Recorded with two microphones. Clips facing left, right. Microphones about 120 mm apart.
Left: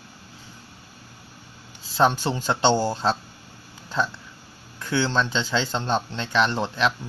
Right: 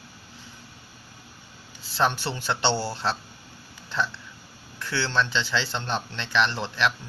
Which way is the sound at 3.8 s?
10° left (ahead or behind).